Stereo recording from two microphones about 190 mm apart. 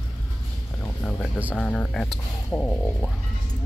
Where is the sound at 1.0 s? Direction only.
5° left (ahead or behind).